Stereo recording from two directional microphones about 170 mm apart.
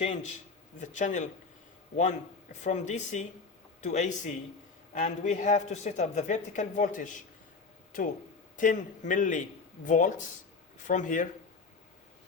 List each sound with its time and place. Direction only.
0.0 s a man's voice: 40° left (ahead or behind)
8.5 s a man's voice: 50° left (ahead or behind)